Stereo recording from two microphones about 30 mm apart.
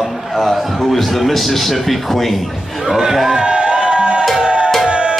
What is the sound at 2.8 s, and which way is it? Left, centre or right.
Speech, centre.